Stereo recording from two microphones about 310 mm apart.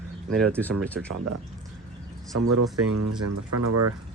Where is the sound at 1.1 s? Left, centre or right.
Right.